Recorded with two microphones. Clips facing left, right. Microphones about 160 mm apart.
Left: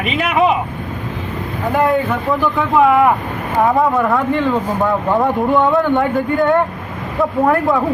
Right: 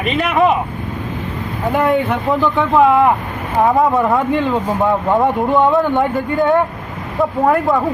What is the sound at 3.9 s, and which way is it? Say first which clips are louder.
Speech: right 1 dB; 20° right (ahead or behind).